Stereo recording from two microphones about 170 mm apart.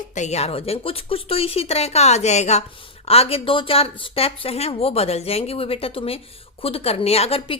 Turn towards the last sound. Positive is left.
turn(degrees=35)  # may be behind; listen again after turning